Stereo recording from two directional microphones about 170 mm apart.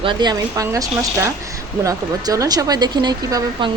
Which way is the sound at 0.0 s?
25° right (ahead or behind).